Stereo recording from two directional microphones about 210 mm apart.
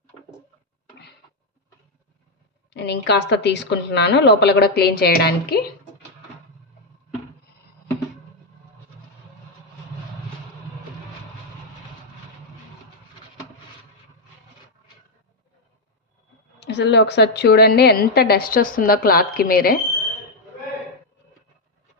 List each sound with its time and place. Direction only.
2.7 s a woman's voice: 55° left (ahead or behind)
16.6 s a woman's voice: 55° left (ahead or behind)